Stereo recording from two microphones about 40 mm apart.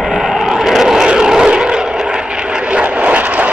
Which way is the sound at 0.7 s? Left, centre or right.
Centre.